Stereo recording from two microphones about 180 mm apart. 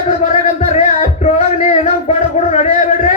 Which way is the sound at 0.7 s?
40° left (ahead or behind).